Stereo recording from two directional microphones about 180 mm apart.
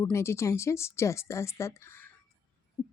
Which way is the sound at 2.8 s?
20° left (ahead or behind).